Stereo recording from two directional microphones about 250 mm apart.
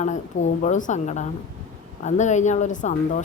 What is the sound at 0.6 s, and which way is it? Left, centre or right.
Speech, left.